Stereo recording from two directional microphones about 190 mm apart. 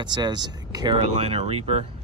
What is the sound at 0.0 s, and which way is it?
Speech, 25° right (ahead or behind).